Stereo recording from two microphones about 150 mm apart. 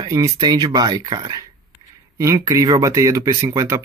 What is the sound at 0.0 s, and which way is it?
Speech, 25° right (ahead or behind).